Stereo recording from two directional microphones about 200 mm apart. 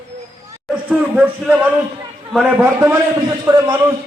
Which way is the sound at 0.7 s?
5° right (ahead or behind).